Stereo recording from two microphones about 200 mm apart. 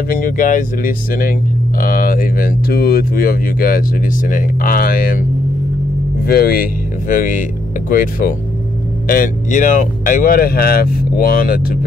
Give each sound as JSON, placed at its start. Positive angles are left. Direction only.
{"t": 0.1, "sound": "speech", "side_deg": 40}
{"t": 6.2, "sound": "speech", "side_deg": 50}